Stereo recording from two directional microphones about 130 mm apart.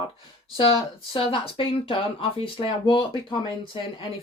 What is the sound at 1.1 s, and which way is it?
Speech, 40° left (ahead or behind).